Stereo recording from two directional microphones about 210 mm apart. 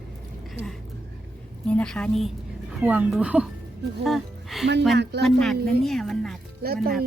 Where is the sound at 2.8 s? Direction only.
10° right (ahead or behind).